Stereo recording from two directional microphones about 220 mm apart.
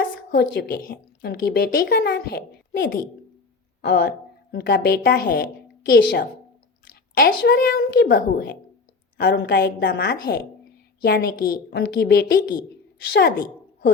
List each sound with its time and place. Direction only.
0.0 s a woman's voice: 45° left (ahead or behind)